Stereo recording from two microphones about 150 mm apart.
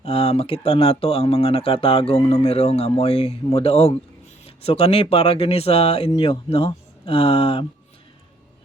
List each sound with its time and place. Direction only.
0.0 s speech: 40° left (ahead or behind)